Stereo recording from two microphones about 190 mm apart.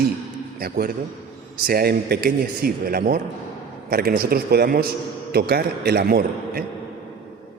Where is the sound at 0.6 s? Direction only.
50° right (ahead or behind).